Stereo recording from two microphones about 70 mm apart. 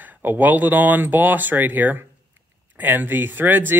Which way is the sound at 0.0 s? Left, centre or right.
Right.